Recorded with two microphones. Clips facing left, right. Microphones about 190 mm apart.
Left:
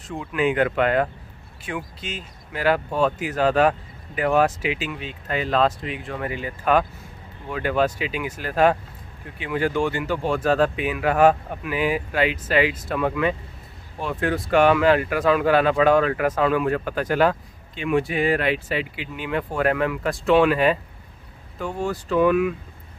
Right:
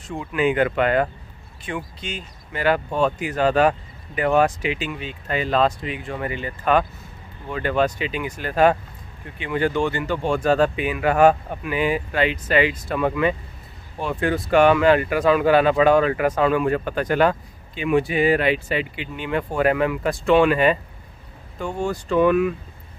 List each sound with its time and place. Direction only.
0.1 s speech: centre (ahead or behind)